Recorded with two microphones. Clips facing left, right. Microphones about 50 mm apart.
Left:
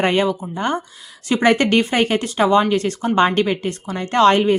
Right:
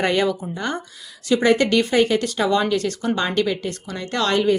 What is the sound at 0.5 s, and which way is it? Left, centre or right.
Speech, left.